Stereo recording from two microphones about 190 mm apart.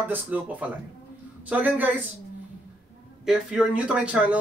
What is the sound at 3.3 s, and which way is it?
Speech, 5° right (ahead or behind).